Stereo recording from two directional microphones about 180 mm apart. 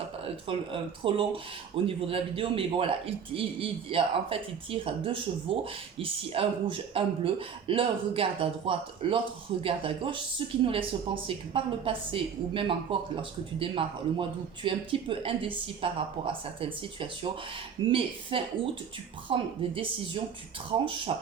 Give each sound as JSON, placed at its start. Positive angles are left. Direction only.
{"t": 0.4, "sound": "speech", "side_deg": -30}
{"t": 21.1, "sound": "speech", "side_deg": -35}